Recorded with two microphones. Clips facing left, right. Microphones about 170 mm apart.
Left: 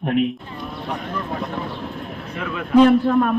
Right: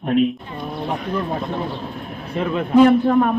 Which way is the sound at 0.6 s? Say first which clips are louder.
Right 4 dB; 20° right (ahead or behind).